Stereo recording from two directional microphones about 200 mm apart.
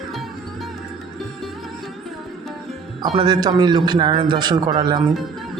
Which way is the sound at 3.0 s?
25° right (ahead or behind).